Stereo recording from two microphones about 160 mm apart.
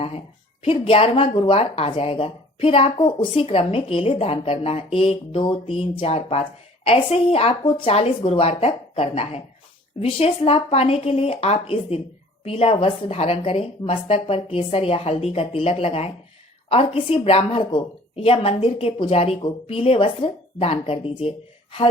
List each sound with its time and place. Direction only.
0.6 s a woman's voice: 35° left (ahead or behind)